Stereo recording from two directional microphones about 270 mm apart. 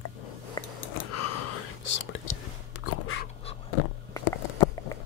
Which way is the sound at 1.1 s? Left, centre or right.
Left.